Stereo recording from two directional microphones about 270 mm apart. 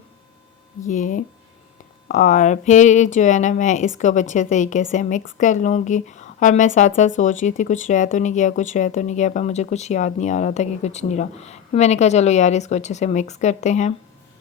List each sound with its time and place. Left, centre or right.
0.9 s speech: left